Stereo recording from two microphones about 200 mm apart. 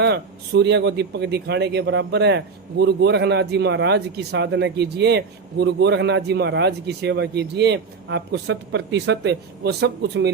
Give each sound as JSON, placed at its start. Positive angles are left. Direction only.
{"t": 0.0, "sound": "a man's voice", "side_deg": -55}